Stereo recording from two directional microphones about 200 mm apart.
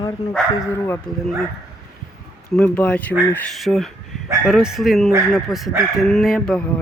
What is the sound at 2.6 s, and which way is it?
Speech, 5° left (ahead or behind).